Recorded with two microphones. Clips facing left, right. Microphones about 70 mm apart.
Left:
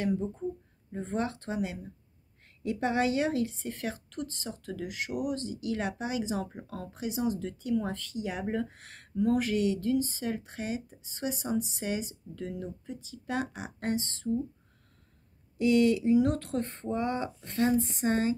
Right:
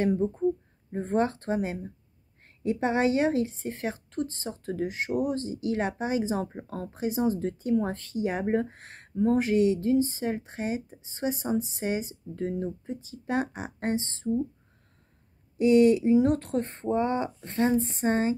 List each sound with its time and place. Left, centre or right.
0.0 s a woman's voice: right
15.5 s speech: right